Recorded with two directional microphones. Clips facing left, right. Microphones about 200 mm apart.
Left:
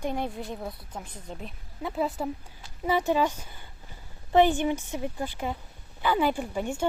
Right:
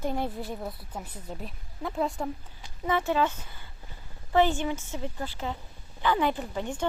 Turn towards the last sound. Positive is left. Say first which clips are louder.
# left 2 dB
turn(degrees=10)  # may be behind; listen again after turning